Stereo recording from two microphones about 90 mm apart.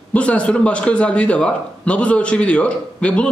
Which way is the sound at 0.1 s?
15° left (ahead or behind).